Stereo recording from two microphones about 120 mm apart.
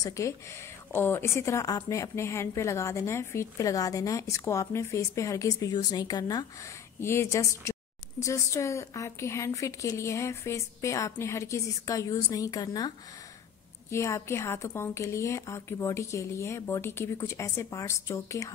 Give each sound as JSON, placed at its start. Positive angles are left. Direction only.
{"t": 0.0, "sound": "a woman's voice", "side_deg": 25}
{"t": 7.0, "sound": "a woman's voice", "side_deg": 20}